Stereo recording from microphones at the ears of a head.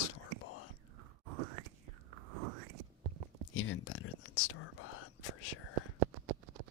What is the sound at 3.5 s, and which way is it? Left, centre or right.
Whispering, left.